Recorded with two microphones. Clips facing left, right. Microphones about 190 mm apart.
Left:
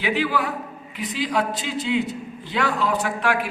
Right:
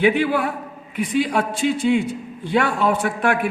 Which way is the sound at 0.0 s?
55° right (ahead or behind).